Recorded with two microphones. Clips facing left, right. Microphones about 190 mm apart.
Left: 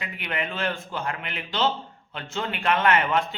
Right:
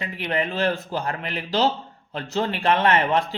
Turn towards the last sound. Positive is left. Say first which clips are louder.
# right 2 dB
turn(degrees=-30)  # may be behind; listen again after turning